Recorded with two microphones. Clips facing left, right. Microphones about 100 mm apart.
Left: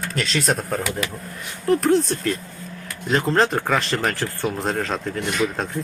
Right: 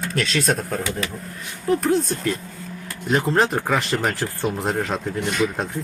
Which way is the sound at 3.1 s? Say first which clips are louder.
Even; 15° right (ahead or behind).